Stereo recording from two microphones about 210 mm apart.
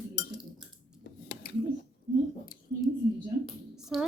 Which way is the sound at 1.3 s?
45° left (ahead or behind).